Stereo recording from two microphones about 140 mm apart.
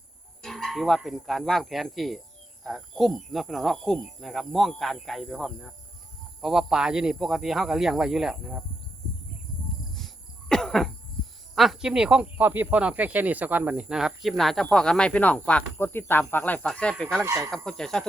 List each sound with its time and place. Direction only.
0.4 s speech: centre (ahead or behind)
10.5 s cough: 5° left (ahead or behind)
11.5 s speech: centre (ahead or behind)
17.2 s speech: 20° right (ahead or behind)
17.5 s speech: 5° left (ahead or behind)